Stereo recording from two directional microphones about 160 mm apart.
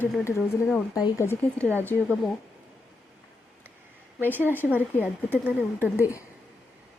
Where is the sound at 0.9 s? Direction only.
20° left (ahead or behind).